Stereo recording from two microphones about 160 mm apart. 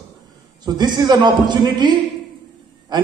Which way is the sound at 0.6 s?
25° right (ahead or behind).